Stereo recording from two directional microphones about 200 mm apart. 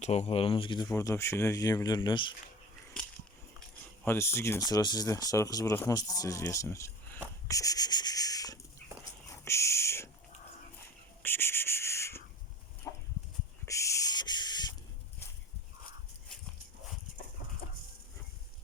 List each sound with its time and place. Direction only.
0.0 s speech: 35° left (ahead or behind)
4.0 s speech: 10° left (ahead or behind)
9.3 s a sound: 15° left (ahead or behind)
11.2 s owl: 10° left (ahead or behind)
13.7 s owl: 15° left (ahead or behind)